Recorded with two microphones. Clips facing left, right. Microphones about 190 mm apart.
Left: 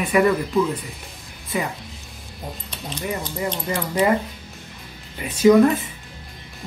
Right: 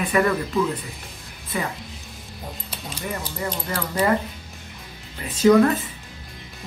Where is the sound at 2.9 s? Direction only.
10° right (ahead or behind).